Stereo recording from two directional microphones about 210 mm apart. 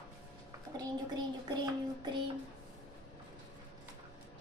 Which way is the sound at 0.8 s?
20° right (ahead or behind).